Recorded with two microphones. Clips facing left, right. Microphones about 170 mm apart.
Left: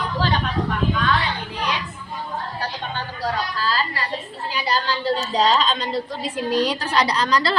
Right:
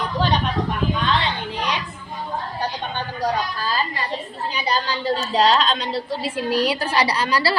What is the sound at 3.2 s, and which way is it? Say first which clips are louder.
A woman's voice: right 2 dB; 15° right (ahead or behind).